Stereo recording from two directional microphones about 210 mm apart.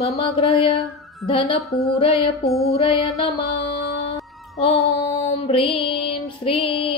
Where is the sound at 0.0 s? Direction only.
30° left (ahead or behind).